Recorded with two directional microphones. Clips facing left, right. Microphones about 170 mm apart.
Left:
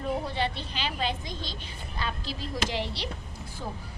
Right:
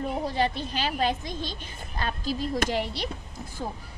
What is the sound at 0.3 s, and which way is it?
A woman's voice, 45° right (ahead or behind).